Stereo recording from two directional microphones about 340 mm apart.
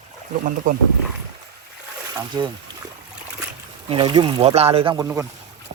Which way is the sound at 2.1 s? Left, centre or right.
Centre.